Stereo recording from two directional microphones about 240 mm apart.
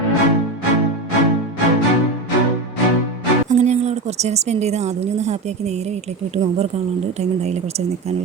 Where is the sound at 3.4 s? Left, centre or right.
Right.